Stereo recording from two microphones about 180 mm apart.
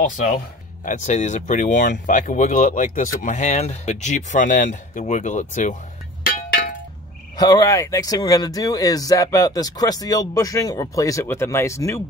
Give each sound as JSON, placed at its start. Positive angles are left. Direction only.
{"t": 0.8, "sound": "speech", "side_deg": 40}
{"t": 6.2, "sound": "a sound", "side_deg": 55}
{"t": 7.3, "sound": "speech", "side_deg": 20}